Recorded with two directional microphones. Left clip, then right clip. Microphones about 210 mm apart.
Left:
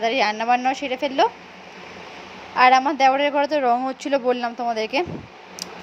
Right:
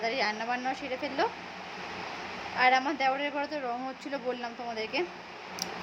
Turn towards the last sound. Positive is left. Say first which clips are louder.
# left 10 dB
turn(degrees=35)  # may be behind; listen again after turning